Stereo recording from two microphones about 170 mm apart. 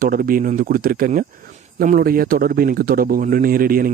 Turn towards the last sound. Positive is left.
turn(degrees=-55)  # may be behind; listen again after turning